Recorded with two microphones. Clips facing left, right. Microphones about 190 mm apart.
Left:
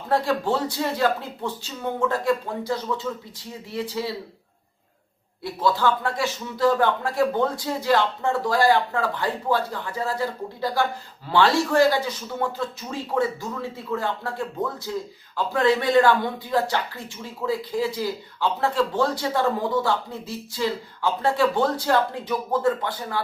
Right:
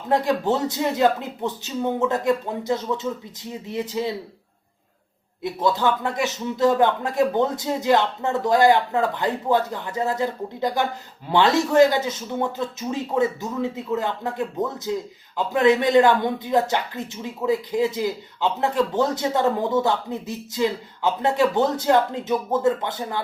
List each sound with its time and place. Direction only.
0.1 s speech: 20° right (ahead or behind)
5.4 s speech: 20° right (ahead or behind)